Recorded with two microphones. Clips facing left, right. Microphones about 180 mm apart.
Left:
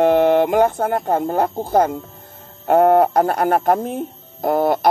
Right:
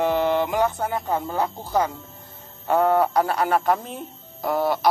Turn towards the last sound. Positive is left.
turn(degrees=50)  # may be behind; listen again after turning